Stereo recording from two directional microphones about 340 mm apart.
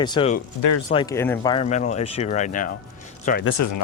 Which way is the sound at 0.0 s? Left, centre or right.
Centre.